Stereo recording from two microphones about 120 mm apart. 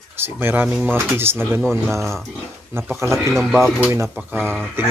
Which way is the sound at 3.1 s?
5° left (ahead or behind).